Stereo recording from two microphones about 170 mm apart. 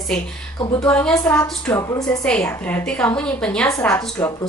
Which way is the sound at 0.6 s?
25° left (ahead or behind).